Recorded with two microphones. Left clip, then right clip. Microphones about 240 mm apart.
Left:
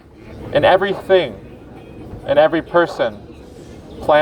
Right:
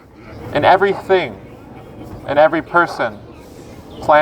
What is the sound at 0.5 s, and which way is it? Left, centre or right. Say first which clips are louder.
Speech: right 1 dB; right.